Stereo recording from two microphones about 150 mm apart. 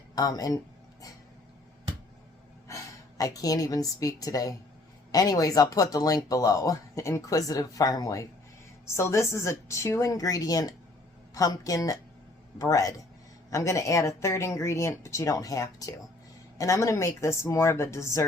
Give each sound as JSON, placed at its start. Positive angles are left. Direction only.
{"t": 0.2, "sound": "speech", "side_deg": 25}
{"t": 2.6, "sound": "a woman's voice", "side_deg": 20}